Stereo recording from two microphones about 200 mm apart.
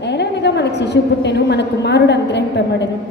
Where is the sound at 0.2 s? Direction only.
60° left (ahead or behind).